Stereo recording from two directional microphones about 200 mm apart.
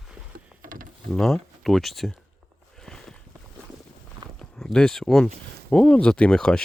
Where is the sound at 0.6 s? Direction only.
45° right (ahead or behind).